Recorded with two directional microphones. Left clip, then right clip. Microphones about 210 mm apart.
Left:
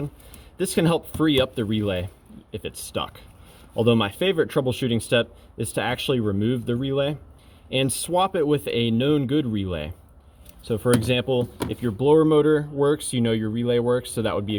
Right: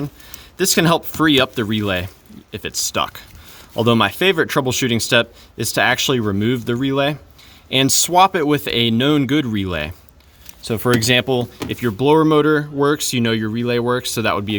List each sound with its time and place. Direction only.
0.5 s speech: 30° right (ahead or behind)